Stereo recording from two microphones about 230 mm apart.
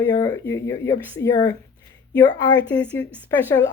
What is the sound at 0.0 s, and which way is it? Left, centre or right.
Speech, centre.